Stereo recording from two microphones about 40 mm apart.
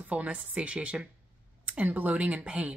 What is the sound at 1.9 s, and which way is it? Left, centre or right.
Speech, right.